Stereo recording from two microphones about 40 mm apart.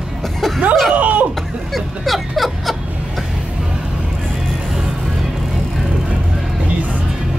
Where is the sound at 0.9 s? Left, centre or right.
Right.